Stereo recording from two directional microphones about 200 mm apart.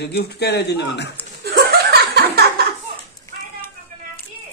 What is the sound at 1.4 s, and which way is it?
Chuckle, 50° right (ahead or behind).